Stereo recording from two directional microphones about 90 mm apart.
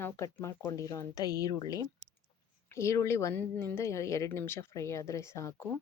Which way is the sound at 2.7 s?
30° left (ahead or behind).